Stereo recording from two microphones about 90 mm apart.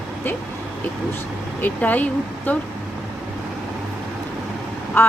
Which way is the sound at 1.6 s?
20° left (ahead or behind).